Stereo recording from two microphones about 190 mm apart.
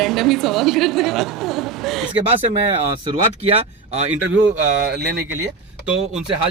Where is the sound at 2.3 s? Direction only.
30° right (ahead or behind).